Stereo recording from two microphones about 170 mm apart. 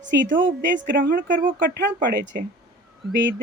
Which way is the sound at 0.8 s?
90° right.